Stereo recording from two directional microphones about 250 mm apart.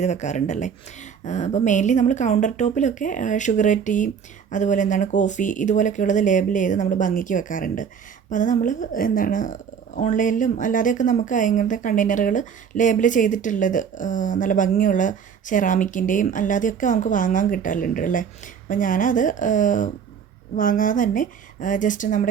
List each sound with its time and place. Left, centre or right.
0.0 s a woman's voice: left